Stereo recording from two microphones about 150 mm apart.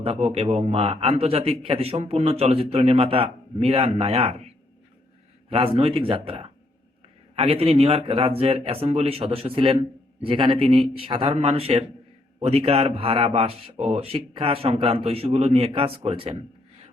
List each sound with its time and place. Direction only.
0.0 s speech: 40° right (ahead or behind)